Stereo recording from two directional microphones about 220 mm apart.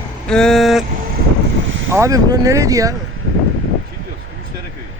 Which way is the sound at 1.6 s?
60° right (ahead or behind).